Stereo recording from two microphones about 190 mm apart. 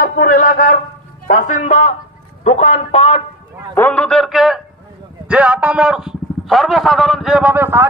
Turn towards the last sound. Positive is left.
turn(degrees=-10)  # may be behind; listen again after turning